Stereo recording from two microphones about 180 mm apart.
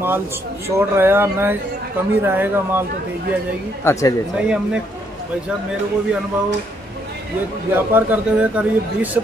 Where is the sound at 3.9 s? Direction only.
15° left (ahead or behind).